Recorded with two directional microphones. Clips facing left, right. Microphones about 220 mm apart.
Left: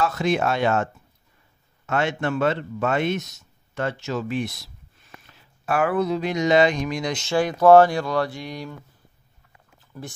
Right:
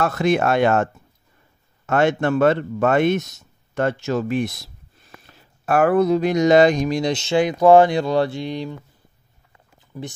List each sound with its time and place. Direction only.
0.0 s speech: 55° right (ahead or behind)
1.9 s speech: 50° right (ahead or behind); by 8.7 s 25° right (ahead or behind)